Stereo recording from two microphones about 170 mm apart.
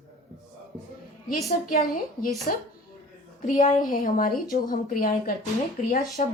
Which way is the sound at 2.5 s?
60° left (ahead or behind).